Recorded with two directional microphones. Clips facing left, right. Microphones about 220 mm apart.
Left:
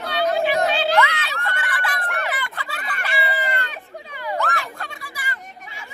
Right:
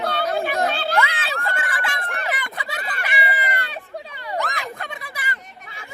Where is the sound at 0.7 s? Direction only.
55° right (ahead or behind).